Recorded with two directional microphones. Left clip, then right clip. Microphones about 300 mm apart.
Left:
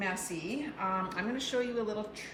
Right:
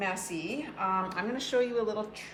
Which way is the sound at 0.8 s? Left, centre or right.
Centre.